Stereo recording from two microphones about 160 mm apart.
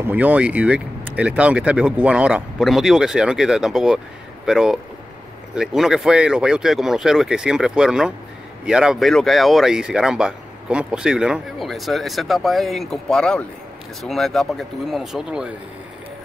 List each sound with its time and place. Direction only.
0.0 s speech: 10° right (ahead or behind)